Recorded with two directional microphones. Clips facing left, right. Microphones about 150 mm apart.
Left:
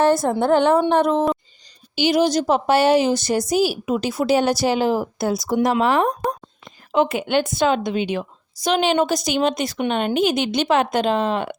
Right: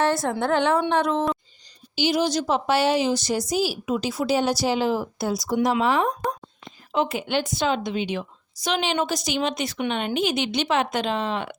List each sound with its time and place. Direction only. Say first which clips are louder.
0.3 s a woman's voice: left 5 dB; 35° left (ahead or behind)
2.0 s a woman's voice: left 5 dB; 60° left (ahead or behind)